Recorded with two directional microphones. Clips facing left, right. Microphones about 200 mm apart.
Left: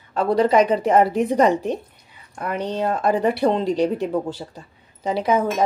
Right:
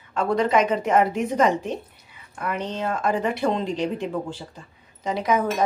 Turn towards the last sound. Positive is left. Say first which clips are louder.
# left 3 dB
turn(degrees=30)  # may be behind; listen again after turning